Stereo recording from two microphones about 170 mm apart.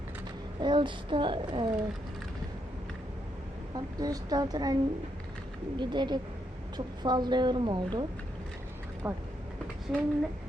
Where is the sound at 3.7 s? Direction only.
25° right (ahead or behind).